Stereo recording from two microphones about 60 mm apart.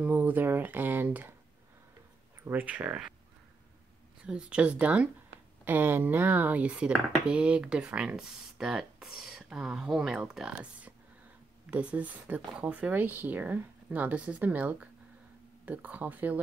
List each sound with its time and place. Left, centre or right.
0.0 s speech: right
2.5 s speech: right
4.3 s speech: centre
5.7 s speech: right; by 10.5 s centre
10.6 s a sound: right
11.7 s speech: right